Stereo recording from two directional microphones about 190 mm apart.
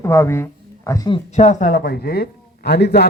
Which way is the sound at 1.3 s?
35° left (ahead or behind).